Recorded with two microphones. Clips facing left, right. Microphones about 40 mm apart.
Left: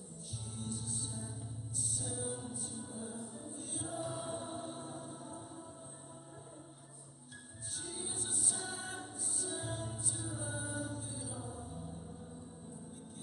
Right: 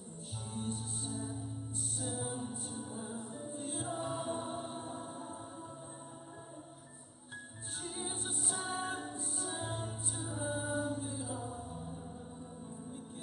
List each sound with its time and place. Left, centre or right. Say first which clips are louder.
0.6 s music: right 3 dB; right
7.8 s music: right 3 dB; right